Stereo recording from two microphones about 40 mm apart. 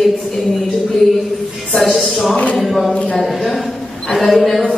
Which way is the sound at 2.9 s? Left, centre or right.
Left.